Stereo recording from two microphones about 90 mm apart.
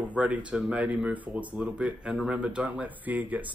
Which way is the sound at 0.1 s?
15° right (ahead or behind).